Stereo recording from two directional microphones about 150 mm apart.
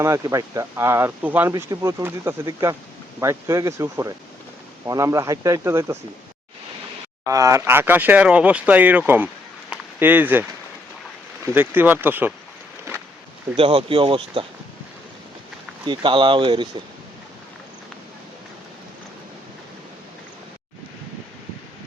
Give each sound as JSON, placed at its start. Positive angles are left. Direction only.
{"t": 0.0, "sound": "speech", "side_deg": -20}
{"t": 7.3, "sound": "speech", "side_deg": -20}
{"t": 11.4, "sound": "speech", "side_deg": -15}
{"t": 13.6, "sound": "speech", "side_deg": -40}
{"t": 15.9, "sound": "speech", "side_deg": -35}